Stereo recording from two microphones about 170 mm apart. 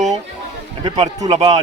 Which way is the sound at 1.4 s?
40° right (ahead or behind).